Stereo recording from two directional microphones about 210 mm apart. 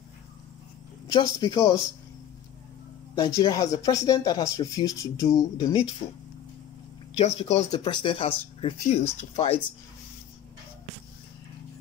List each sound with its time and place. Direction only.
1.5 s speech: 15° left (ahead or behind)
3.2 s speech: 15° left (ahead or behind)
7.2 s speech: 30° left (ahead or behind)
7.7 s speech: 20° left (ahead or behind)